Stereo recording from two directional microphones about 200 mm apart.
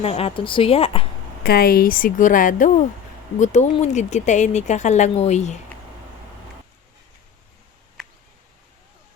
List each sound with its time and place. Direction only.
0.0 s speech: 30° left (ahead or behind)
1.5 s speech: 50° left (ahead or behind); by 5.5 s 35° left (ahead or behind)